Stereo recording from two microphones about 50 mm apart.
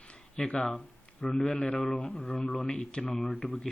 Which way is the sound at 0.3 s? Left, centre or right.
Left.